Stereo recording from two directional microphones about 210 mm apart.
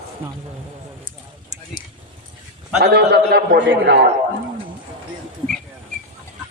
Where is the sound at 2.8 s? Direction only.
50° right (ahead or behind).